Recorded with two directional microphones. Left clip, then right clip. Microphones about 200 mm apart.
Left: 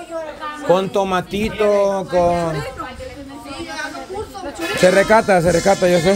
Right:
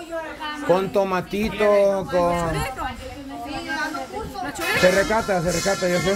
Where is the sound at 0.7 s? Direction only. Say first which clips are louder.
Left 4 dB; 10° left (ahead or behind).